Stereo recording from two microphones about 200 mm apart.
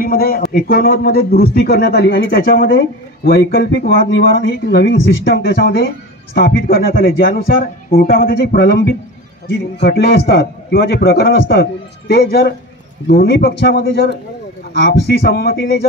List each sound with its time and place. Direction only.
0.0 s a man's voice: 50° left (ahead or behind)